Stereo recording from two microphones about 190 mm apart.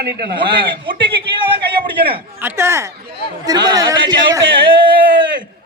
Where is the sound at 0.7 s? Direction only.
25° right (ahead or behind).